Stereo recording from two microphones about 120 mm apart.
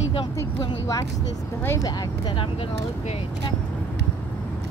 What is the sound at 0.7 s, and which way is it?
Vehicle, 30° left (ahead or behind).